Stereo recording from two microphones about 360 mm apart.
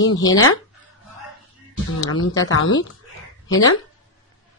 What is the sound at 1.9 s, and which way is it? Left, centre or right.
Speech, centre.